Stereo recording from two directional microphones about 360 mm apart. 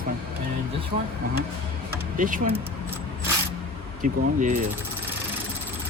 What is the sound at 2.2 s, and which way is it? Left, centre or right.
Speech, right.